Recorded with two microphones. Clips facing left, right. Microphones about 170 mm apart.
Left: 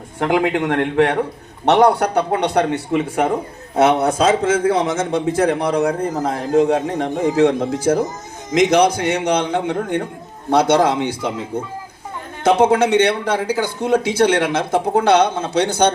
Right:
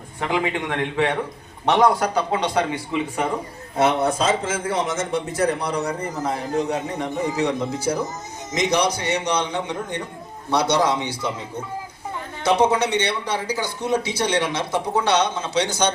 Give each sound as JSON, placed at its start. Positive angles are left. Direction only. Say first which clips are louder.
{"t": 0.2, "sound": "a man's voice", "louder": "left 6 dB", "side_deg": 65}
{"t": 3.8, "sound": "a man's voice", "louder": "left 5 dB", "side_deg": 75}
{"t": 12.5, "sound": "a man's voice", "louder": "left 5 dB", "side_deg": 55}